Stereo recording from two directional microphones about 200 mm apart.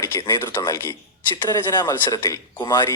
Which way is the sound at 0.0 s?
15° left (ahead or behind).